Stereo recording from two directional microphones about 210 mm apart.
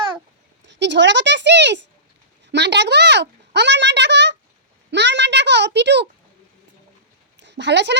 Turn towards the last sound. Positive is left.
turn(degrees=-55)  # may be behind; listen again after turning